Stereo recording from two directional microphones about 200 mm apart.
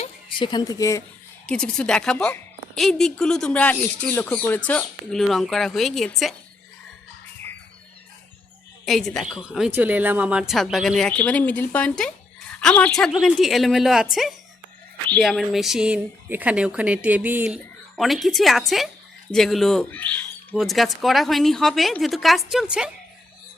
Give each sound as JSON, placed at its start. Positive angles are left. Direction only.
{"t": 0.0, "sound": "speech", "side_deg": 25}
{"t": 1.5, "sound": "a woman's voice", "side_deg": 5}
{"t": 8.9, "sound": "a woman's voice", "side_deg": 0}